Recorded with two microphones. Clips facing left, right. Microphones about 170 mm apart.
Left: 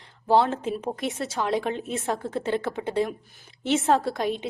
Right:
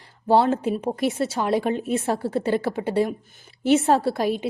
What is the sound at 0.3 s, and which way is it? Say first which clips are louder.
A woman's voice: right 3 dB; centre (ahead or behind).